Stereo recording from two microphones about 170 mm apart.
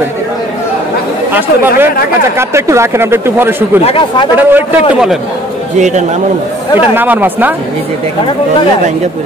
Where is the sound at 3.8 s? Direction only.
30° left (ahead or behind).